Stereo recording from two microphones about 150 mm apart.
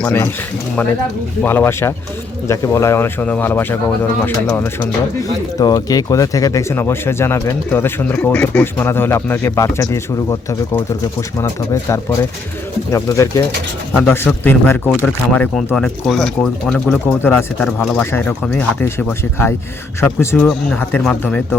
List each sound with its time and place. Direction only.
0.0 s speech: 15° left (ahead or behind)
18.9 s speech: 15° left (ahead or behind)